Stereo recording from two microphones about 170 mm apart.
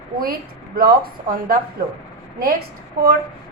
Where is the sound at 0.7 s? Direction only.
60° right (ahead or behind).